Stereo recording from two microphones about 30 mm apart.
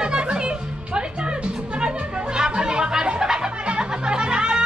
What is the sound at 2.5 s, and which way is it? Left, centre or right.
Music, right.